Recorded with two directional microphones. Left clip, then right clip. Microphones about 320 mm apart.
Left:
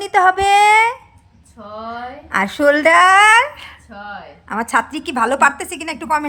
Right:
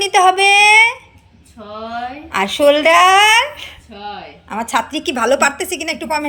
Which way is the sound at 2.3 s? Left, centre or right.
Centre.